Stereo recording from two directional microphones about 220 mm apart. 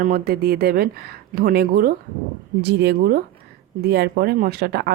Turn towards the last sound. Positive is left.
turn(degrees=-45)  # may be behind; listen again after turning